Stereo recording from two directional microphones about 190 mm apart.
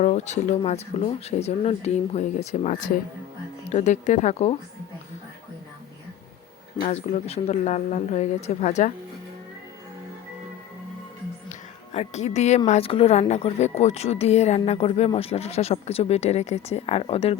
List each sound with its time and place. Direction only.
0.0 s a woman's voice: 35° left (ahead or behind)
6.8 s a woman's voice: 35° left (ahead or behind)
11.4 s a woman's voice: 35° left (ahead or behind)